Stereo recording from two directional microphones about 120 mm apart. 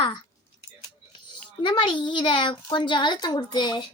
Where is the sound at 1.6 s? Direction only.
40° left (ahead or behind).